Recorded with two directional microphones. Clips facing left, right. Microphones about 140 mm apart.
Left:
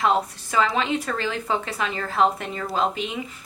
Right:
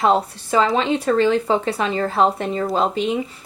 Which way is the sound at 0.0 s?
30° right (ahead or behind).